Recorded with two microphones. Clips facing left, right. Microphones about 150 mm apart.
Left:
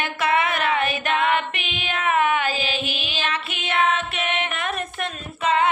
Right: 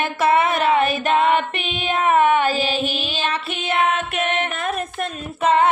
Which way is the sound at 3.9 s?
45° right (ahead or behind).